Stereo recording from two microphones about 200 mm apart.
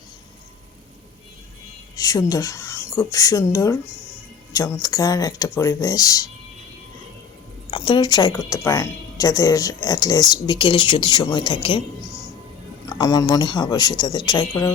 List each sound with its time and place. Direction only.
2.0 s speech: 20° left (ahead or behind)
7.7 s a woman's voice: 25° left (ahead or behind)
12.9 s a woman's voice: 20° left (ahead or behind)